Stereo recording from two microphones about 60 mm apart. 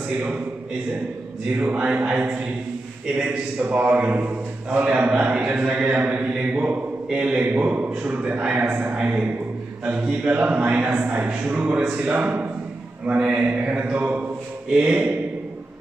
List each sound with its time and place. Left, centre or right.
0.2 s a man's voice: right
1.6 s a man's voice: centre